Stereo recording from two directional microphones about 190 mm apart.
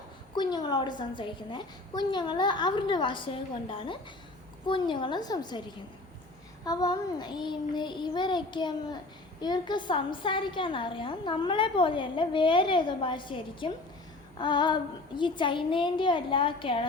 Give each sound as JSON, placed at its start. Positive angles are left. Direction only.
{"t": 0.3, "sound": "a woman's voice", "side_deg": 25}